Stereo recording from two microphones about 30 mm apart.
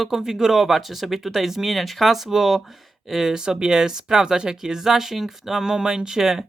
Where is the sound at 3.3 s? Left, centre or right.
Right.